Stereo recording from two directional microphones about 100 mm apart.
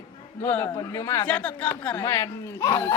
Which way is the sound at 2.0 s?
30° left (ahead or behind).